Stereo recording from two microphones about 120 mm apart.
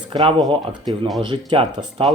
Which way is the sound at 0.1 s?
40° right (ahead or behind).